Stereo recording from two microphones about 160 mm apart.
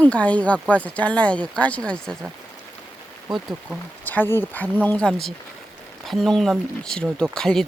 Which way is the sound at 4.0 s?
10° left (ahead or behind).